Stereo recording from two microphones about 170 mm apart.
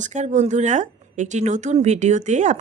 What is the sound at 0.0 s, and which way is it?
Speech, 45° right (ahead or behind).